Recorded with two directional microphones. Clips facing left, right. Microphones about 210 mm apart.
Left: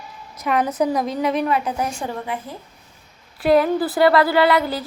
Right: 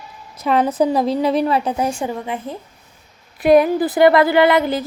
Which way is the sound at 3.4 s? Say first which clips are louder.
Right 4 dB; 20° right (ahead or behind).